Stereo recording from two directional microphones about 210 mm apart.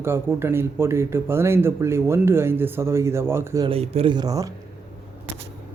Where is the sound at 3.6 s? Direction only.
30° right (ahead or behind).